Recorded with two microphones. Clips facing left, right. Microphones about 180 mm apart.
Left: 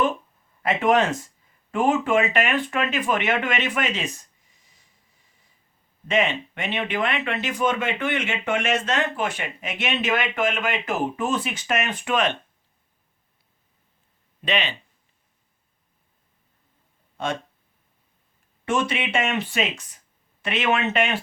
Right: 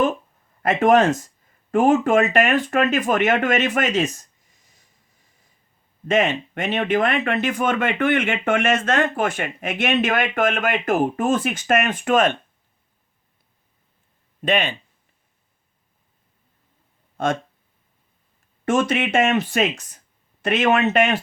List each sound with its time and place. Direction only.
0.6 s speech: 45° right (ahead or behind)
6.1 s speech: 45° right (ahead or behind)
14.4 s speech: 50° right (ahead or behind)
17.2 s speech: 45° right (ahead or behind)
18.6 s speech: 45° right (ahead or behind)